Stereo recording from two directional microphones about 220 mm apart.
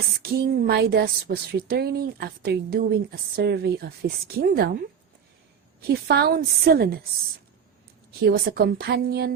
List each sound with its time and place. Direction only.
0.2 s a woman's voice: 45° right (ahead or behind)
5.8 s a woman's voice: 45° right (ahead or behind)
8.2 s a woman's voice: 45° right (ahead or behind)